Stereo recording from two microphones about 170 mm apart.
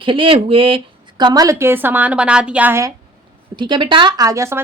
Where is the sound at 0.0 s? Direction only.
30° right (ahead or behind); by 2.9 s 15° right (ahead or behind).